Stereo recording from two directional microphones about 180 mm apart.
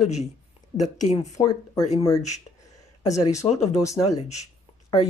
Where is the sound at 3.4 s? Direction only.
20° left (ahead or behind).